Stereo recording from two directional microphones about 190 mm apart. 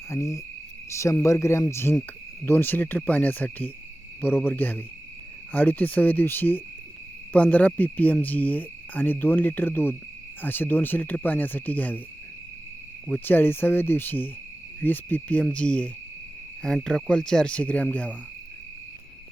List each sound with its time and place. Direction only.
0.1 s cricket: 15° left (ahead or behind)
13.1 s cricket: 10° left (ahead or behind)
16.6 s speech: 5° left (ahead or behind)